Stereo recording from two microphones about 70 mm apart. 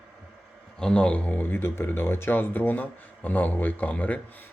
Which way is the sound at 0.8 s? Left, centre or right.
Centre.